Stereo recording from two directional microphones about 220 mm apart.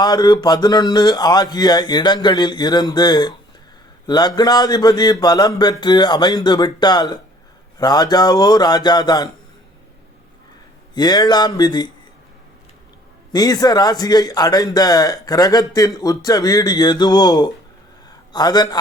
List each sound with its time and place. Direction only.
0.0 s a man's voice: 20° left (ahead or behind)
10.9 s speech: 20° left (ahead or behind)
13.3 s a man's voice: 15° left (ahead or behind)